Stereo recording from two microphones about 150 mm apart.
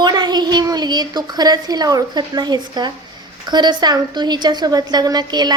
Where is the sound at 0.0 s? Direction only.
30° right (ahead or behind).